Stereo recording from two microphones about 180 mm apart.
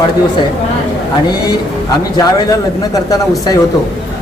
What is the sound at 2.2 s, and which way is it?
Speech, 20° left (ahead or behind).